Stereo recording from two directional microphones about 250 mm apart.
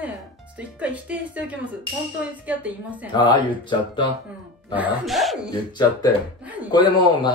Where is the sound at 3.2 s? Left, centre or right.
Centre.